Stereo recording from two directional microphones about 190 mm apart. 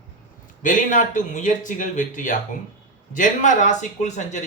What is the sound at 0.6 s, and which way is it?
Speech, 45° left (ahead or behind).